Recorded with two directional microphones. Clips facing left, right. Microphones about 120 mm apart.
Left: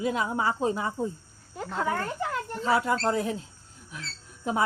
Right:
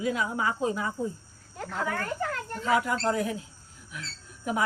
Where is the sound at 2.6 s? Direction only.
30° left (ahead or behind).